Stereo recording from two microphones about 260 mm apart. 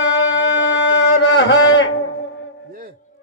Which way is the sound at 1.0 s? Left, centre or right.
Left.